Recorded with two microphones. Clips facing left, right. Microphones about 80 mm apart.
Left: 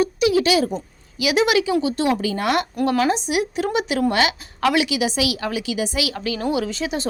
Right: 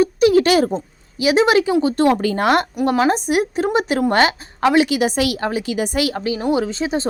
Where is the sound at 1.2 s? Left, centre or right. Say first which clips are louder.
Right 4 dB; right.